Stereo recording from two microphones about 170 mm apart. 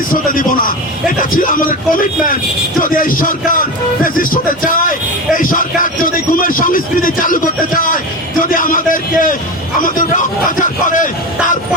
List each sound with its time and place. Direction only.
0.1 s a man's voice: 55° left (ahead or behind)